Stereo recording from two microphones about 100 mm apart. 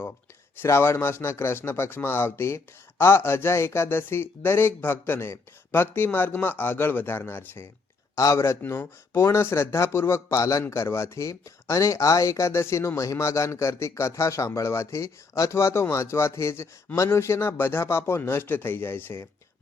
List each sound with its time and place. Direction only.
0.6 s speech: 25° left (ahead or behind)